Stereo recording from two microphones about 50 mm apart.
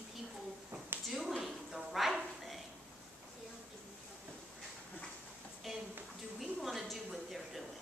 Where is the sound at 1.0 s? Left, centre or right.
Centre.